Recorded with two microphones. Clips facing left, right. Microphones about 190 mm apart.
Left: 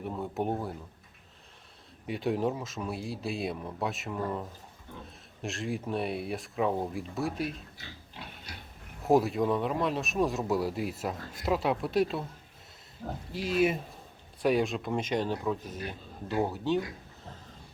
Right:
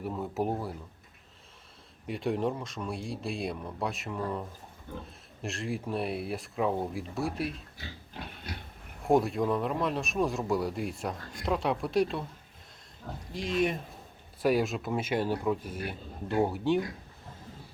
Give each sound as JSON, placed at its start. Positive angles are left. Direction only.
{"t": 0.0, "sound": "speech", "side_deg": 0}
{"t": 2.0, "sound": "speech", "side_deg": 0}
{"t": 9.0, "sound": "speech", "side_deg": 0}
{"t": 13.3, "sound": "speech", "side_deg": 5}